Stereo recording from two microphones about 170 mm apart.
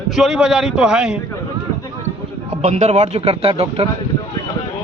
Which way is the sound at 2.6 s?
40° right (ahead or behind).